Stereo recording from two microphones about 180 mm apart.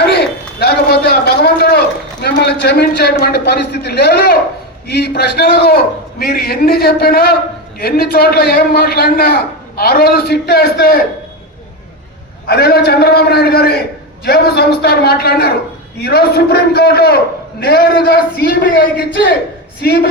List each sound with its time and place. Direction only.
0.0 s a sound: 65° left (ahead or behind)
2.2 s a man's voice: 65° left (ahead or behind)
12.5 s a man's voice: 60° left (ahead or behind)